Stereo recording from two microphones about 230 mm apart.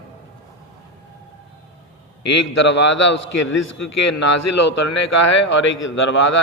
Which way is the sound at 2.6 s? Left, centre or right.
Left.